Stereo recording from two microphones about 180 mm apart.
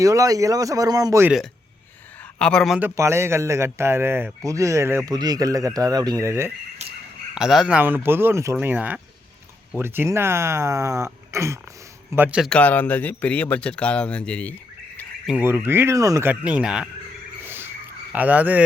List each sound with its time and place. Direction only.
0.0 s speech: 20° right (ahead or behind)
2.4 s speech: 5° left (ahead or behind)
2.7 s speech: 15° right (ahead or behind)
7.3 s speech: 5° right (ahead or behind)
12.5 s speech: 5° left (ahead or behind)
15.3 s speech: 10° right (ahead or behind)
17.4 s a sound: 10° right (ahead or behind)
18.1 s speech: 10° right (ahead or behind)